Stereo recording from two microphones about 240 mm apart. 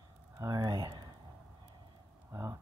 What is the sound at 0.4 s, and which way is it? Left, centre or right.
Speech, centre.